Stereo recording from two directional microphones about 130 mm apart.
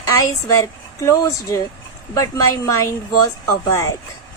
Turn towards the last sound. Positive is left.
turn(degrees=25)  # may be behind; listen again after turning